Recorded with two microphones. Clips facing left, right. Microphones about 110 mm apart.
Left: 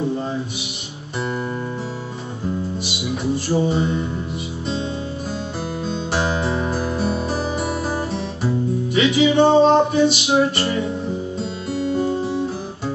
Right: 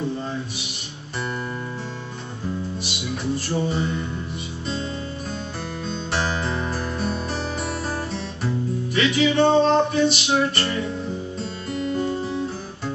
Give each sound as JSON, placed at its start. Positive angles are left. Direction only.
{"t": 3.4, "sound": "music", "side_deg": 5}
{"t": 5.9, "sound": "music", "side_deg": 5}
{"t": 11.7, "sound": "music", "side_deg": 25}